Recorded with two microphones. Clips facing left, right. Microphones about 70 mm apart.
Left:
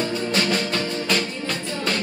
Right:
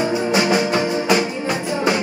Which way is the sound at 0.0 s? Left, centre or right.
Centre.